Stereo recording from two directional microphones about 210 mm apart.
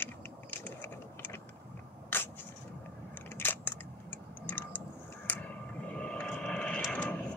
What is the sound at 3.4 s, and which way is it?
Scissors, 10° left (ahead or behind).